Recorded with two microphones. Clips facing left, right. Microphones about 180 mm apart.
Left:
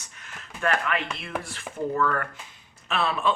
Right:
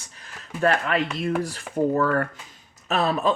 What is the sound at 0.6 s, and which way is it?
Speech, 35° right (ahead or behind).